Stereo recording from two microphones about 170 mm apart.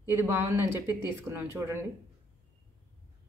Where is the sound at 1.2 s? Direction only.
15° right (ahead or behind).